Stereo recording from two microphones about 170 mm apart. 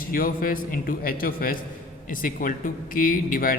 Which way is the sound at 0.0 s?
55° left (ahead or behind).